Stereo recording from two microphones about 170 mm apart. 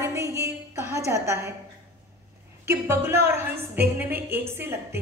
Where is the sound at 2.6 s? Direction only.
15° right (ahead or behind).